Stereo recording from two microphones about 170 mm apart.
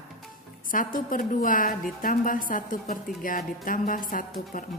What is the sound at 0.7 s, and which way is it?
A woman's voice, 55° left (ahead or behind).